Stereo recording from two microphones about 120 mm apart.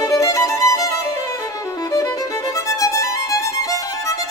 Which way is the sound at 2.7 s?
25° left (ahead or behind).